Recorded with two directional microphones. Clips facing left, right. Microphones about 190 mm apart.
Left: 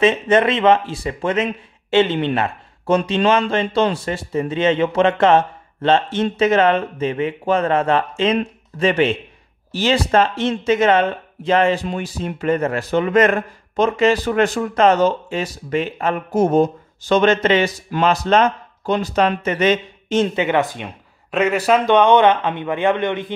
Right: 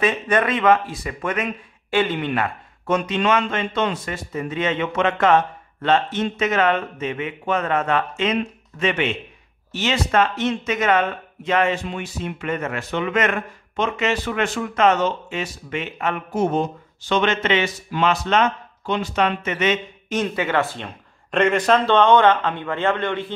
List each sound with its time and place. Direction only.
0.0 s speech: 25° left (ahead or behind)
21.3 s a man's voice: 5° left (ahead or behind)